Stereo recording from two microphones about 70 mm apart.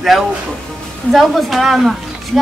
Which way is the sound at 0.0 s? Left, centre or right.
Centre.